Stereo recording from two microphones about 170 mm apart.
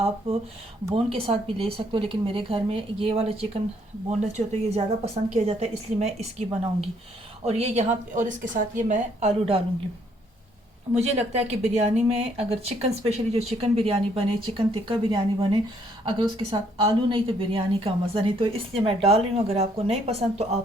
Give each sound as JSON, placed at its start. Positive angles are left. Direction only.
{"t": 0.9, "sound": "speech", "side_deg": -35}
{"t": 7.4, "sound": "speech", "side_deg": -40}
{"t": 10.9, "sound": "speech", "side_deg": -40}